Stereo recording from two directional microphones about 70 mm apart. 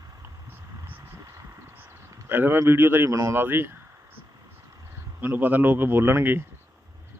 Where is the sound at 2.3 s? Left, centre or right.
Right.